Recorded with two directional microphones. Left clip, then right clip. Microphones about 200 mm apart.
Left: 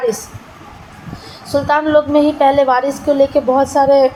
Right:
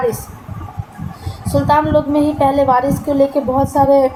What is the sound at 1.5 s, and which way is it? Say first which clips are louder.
A woman's voice: even; 20° left (ahead or behind).